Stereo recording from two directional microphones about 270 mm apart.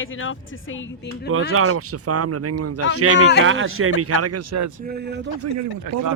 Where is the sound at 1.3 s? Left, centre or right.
Right.